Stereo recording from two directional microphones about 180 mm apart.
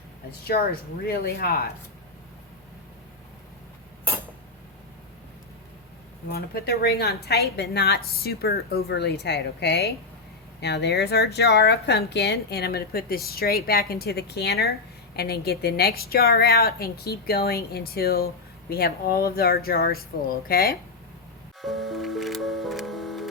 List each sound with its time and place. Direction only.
0.4 s speech: 60° left (ahead or behind)
6.2 s speech: 60° left (ahead or behind)
21.6 s music: centre (ahead or behind)